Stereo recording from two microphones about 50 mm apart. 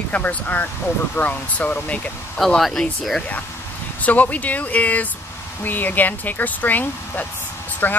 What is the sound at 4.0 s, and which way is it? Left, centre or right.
Speech, left.